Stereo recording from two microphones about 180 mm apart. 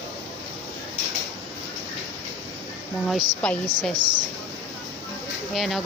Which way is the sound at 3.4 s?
5° left (ahead or behind).